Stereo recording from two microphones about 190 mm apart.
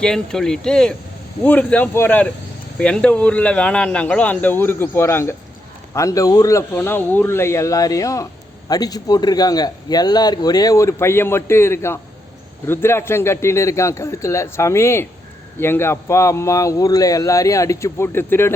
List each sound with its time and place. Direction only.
0.0 s a man's voice: 5° left (ahead or behind)